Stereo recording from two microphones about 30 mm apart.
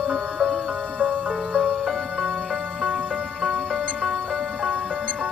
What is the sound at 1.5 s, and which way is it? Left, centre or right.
Music, centre.